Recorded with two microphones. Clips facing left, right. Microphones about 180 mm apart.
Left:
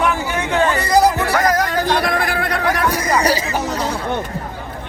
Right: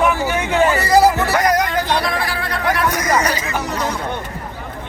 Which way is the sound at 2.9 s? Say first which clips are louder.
Left 3 dB; 30° left (ahead or behind).